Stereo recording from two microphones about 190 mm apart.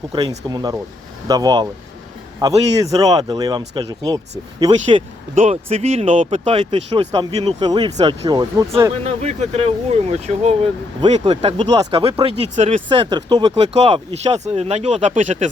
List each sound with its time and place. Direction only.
0.1 s speech: 20° right (ahead or behind)
5.3 s speech: 35° right (ahead or behind); by 8.9 s 20° right (ahead or behind)
9.0 s speech: 35° right (ahead or behind)
13.7 s speech: 35° right (ahead or behind)